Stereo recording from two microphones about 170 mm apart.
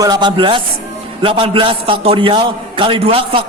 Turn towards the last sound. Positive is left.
turn(degrees=-35)  # may be behind; listen again after turning